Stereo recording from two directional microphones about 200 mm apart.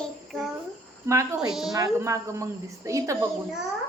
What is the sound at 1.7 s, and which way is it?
A woman's voice, 15° right (ahead or behind).